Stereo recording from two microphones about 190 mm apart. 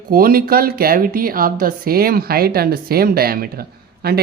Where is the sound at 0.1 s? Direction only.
50° right (ahead or behind).